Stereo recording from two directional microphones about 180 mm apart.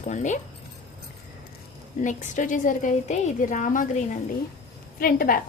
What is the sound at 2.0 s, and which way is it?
A woman's voice, 45° left (ahead or behind).